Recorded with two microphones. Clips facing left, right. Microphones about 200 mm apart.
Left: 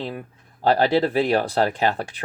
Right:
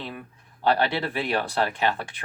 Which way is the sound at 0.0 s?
40° left (ahead or behind).